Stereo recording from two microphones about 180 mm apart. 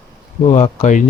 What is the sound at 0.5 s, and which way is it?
Speech, 40° left (ahead or behind).